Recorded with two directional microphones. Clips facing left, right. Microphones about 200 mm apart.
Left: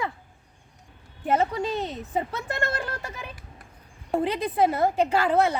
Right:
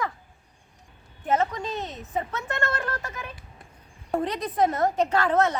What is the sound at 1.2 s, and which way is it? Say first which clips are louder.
Speech: left 1 dB; 10° left (ahead or behind).